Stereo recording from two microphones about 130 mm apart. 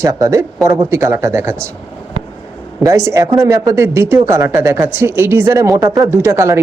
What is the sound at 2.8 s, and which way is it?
Speech, 25° right (ahead or behind).